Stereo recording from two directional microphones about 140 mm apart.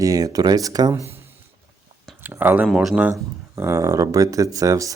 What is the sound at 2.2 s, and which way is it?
Speech, 15° right (ahead or behind).